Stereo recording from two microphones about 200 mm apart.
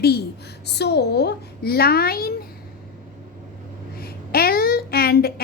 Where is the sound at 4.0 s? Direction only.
50° left (ahead or behind).